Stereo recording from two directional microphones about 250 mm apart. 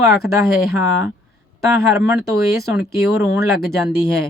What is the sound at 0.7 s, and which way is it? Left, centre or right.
Speech, centre.